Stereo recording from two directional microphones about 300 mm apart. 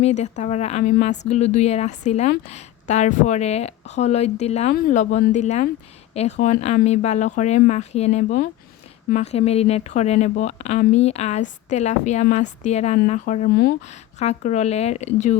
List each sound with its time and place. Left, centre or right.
0.0 s speech: left